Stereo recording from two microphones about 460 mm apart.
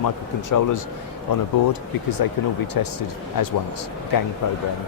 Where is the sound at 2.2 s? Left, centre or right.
Left.